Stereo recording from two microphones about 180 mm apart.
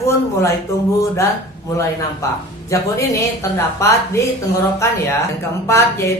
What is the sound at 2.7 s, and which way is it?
Speech, 15° left (ahead or behind).